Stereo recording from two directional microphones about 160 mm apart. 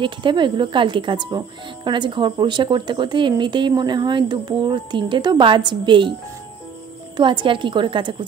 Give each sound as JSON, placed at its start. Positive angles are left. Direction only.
{"t": 0.0, "sound": "speech", "side_deg": -30}
{"t": 7.2, "sound": "a woman's voice", "side_deg": -30}